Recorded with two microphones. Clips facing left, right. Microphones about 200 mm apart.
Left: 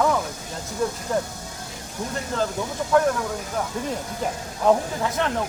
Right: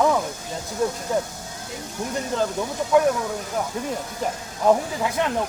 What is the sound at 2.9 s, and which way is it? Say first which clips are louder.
Speech: right 1 dB; 15° right (ahead or behind).